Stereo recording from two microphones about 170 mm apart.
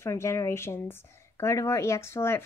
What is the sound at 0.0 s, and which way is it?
Speech, 15° left (ahead or behind).